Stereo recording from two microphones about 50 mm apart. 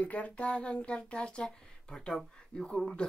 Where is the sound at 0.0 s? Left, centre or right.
Left.